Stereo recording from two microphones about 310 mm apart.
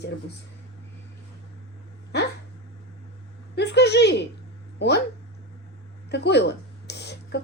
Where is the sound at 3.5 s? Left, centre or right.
Left.